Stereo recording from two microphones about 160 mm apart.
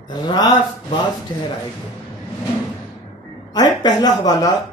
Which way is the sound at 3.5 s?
25° left (ahead or behind).